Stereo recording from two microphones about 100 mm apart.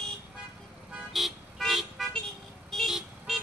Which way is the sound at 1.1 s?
Centre (ahead or behind).